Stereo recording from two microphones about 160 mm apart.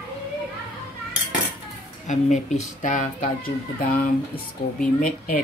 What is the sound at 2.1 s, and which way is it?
Speech, 50° left (ahead or behind).